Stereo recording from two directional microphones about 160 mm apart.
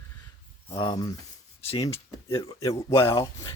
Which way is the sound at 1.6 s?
35° left (ahead or behind).